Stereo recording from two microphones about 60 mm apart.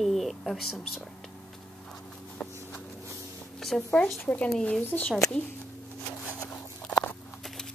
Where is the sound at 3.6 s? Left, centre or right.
Centre.